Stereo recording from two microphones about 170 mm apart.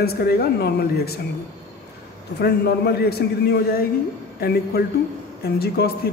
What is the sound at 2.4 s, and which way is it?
A man's voice, 75° left (ahead or behind).